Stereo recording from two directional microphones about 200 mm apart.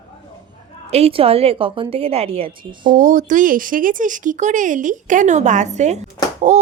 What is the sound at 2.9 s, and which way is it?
A woman's voice, 40° right (ahead or behind).